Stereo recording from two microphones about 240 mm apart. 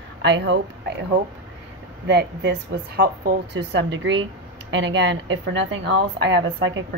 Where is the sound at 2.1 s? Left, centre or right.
Right.